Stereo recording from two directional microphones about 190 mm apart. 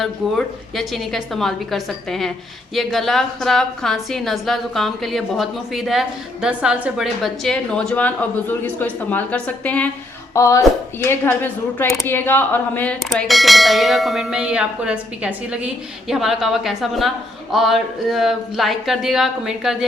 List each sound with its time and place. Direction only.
0.0 s a woman's voice: centre (ahead or behind)